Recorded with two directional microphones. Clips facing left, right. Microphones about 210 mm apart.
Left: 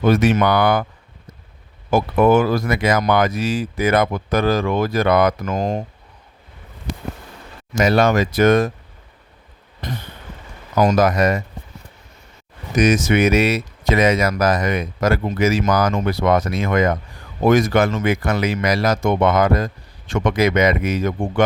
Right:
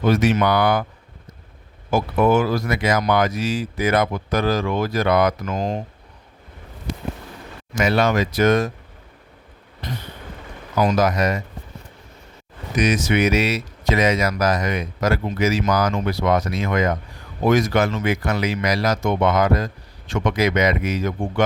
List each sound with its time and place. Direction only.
0.0 s speech: 55° left (ahead or behind)
1.9 s speech: 55° left (ahead or behind)
7.8 s speech: 40° left (ahead or behind)
9.8 s a sound: 50° left (ahead or behind)
10.8 s speech: 50° left (ahead or behind)
12.7 s speech: 45° left (ahead or behind)